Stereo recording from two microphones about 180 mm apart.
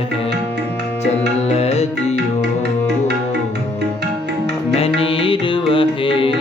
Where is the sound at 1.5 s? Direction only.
35° left (ahead or behind).